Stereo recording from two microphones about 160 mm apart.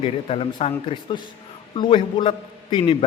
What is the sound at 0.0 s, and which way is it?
A man's voice, 35° left (ahead or behind).